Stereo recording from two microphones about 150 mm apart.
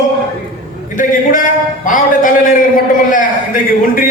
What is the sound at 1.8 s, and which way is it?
Music, 60° left (ahead or behind).